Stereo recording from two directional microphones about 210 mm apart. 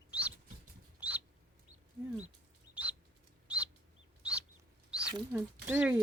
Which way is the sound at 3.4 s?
5° right (ahead or behind).